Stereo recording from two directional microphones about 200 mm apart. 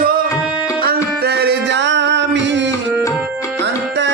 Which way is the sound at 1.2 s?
55° right (ahead or behind).